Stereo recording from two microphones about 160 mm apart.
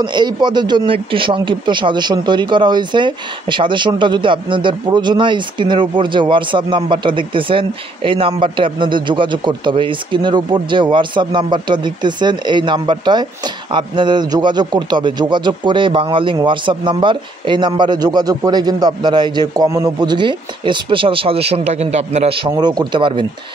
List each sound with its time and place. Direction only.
0.0 s speech: 30° right (ahead or behind)
22.5 s speech: 25° right (ahead or behind)